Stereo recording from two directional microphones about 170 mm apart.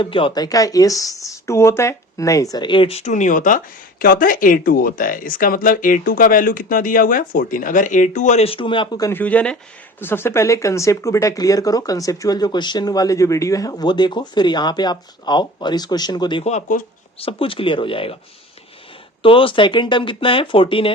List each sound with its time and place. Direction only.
0.0 s speech: 30° left (ahead or behind)
9.1 s speech: 10° left (ahead or behind); by 16.4 s 25° left (ahead or behind)
16.4 s speech: 40° left (ahead or behind)
17.2 s speech: 30° left (ahead or behind)
19.2 s speech: 30° left (ahead or behind)